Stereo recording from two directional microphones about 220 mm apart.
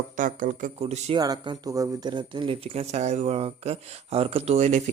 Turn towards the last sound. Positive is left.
turn(degrees=-30)  # may be behind; listen again after turning